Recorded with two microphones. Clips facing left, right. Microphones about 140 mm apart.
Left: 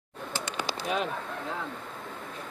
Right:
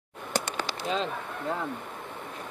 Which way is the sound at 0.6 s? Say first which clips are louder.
Left 4 dB; 15° left (ahead or behind).